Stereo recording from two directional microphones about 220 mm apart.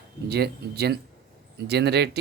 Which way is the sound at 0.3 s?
45° right (ahead or behind).